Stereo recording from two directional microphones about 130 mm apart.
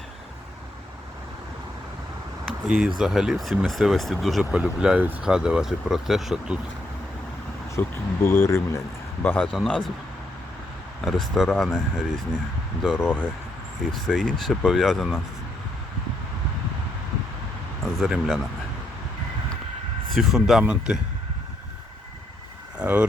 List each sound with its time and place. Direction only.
2.6 s speech: 5° right (ahead or behind)
7.8 s speech: 20° left (ahead or behind)
11.0 s speech: centre (ahead or behind)
13.1 s speech: 10° left (ahead or behind)
17.8 s speech: centre (ahead or behind)
20.1 s speech: centre (ahead or behind)
22.8 s speech: 10° right (ahead or behind)